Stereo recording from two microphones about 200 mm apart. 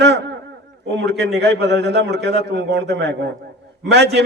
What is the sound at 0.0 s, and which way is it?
A man's voice, 60° right (ahead or behind).